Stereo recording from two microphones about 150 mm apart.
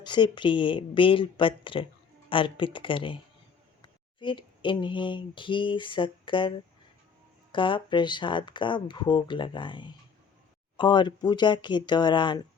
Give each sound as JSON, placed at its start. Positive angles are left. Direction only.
{"t": 0.0, "sound": "speech", "side_deg": 30}
{"t": 7.5, "sound": "speech", "side_deg": 35}